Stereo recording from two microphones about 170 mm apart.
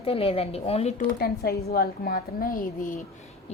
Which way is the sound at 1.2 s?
65° left (ahead or behind).